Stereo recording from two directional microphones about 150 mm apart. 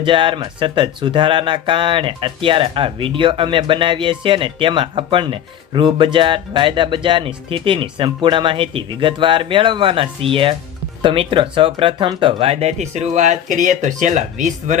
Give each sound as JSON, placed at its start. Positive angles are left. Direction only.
{"t": 0.0, "sound": "speech", "side_deg": -35}